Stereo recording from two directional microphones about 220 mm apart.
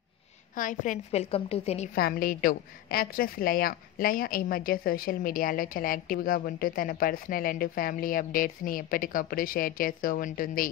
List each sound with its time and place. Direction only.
0.6 s a woman's voice: 35° left (ahead or behind)
2.0 s a woman's voice: 45° left (ahead or behind)